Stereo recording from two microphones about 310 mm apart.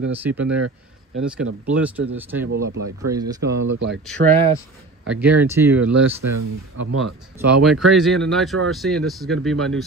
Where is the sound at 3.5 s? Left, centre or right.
Right.